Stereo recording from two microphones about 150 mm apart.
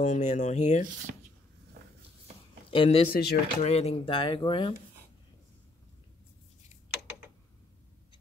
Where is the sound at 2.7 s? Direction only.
40° left (ahead or behind).